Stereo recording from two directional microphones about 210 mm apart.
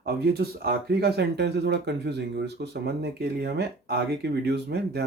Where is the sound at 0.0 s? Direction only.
50° right (ahead or behind).